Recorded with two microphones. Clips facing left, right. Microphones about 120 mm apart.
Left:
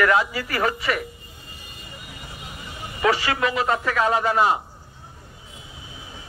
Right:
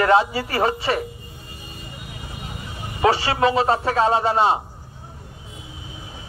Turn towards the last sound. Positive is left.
turn(degrees=-30)  # may be behind; listen again after turning